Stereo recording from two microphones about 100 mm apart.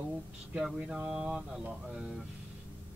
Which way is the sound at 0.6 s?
5° right (ahead or behind).